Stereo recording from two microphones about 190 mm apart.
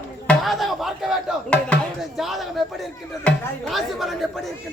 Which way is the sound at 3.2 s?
Centre (ahead or behind).